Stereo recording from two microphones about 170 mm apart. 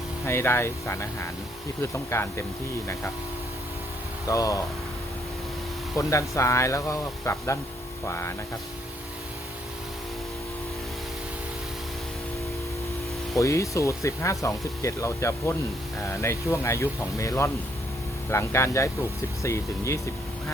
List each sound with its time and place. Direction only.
0.3 s speech: 15° left (ahead or behind)
4.3 s speech: 20° left (ahead or behind)
6.0 s speech: 15° left (ahead or behind)
13.3 s speech: 20° left (ahead or behind)